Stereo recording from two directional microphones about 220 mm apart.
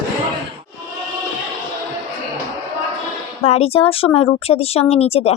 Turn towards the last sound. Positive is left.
turn(degrees=25)  # may be behind; listen again after turning